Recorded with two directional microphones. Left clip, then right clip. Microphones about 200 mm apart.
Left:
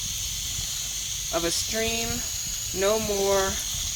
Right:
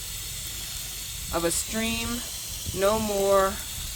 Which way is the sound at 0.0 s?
35° right (ahead or behind).